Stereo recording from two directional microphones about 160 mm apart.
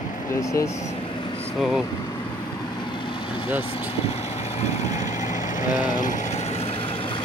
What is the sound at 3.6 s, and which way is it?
Vehicle, 35° left (ahead or behind).